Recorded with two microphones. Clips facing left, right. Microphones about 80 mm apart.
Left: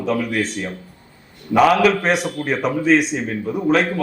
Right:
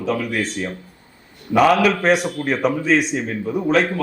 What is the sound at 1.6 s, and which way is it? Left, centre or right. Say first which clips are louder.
Speech: even; centre.